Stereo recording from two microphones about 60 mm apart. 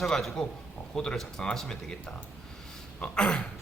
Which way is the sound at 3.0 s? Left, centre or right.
Centre.